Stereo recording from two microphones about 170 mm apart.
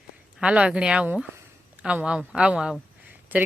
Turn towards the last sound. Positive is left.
turn(degrees=-10)  # may be behind; listen again after turning